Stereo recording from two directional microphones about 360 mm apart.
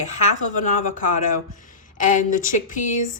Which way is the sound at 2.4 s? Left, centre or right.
Left.